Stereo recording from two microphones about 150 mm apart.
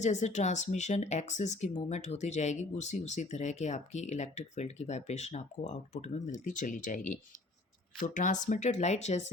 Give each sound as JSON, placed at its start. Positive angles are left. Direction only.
{"t": 0.0, "sound": "speech", "side_deg": 50}